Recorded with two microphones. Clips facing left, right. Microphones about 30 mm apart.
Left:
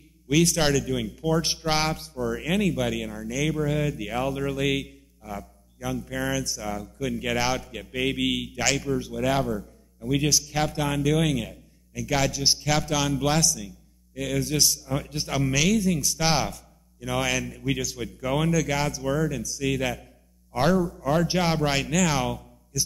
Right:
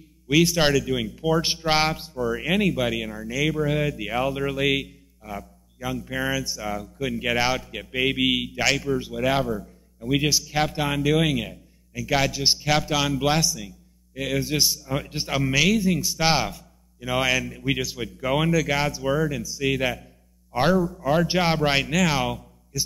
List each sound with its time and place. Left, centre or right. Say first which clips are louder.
0.3 s a man's voice: right 2 dB; centre
0.8 s speech: right 2 dB; centre
1.4 s a man's voice: right 3 dB; right
2.1 s a man's voice: right 3 dB; centre
20.7 s speech: right 2 dB; centre
21.3 s a man's voice: right 3 dB; right